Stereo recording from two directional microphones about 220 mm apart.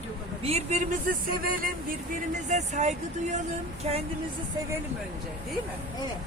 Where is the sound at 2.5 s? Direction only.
30° right (ahead or behind).